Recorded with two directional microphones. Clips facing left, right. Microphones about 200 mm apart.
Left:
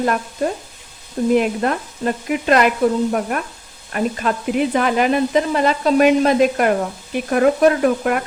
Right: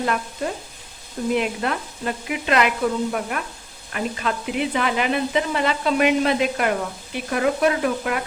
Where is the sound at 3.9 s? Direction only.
45° left (ahead or behind).